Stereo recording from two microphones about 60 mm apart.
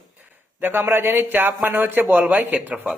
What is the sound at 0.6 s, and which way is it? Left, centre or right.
A man's voice, right.